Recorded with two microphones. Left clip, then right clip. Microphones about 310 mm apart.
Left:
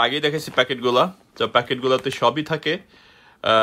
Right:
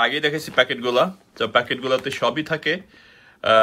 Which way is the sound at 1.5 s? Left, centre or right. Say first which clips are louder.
Even; centre.